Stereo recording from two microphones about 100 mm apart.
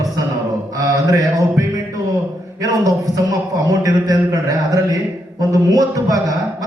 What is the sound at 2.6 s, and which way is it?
Mantra, 40° right (ahead or behind).